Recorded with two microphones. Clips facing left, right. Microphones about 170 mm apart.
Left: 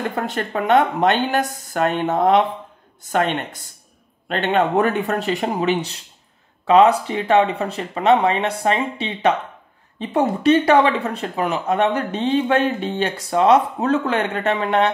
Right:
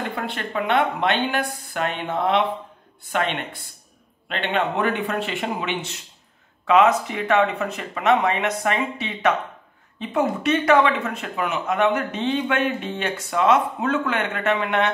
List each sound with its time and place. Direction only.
0.1 s speech: 45° left (ahead or behind)